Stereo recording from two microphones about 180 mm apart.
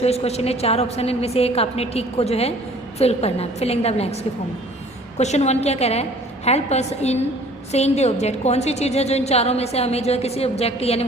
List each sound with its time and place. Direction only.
0.0 s a woman's voice: 35° left (ahead or behind)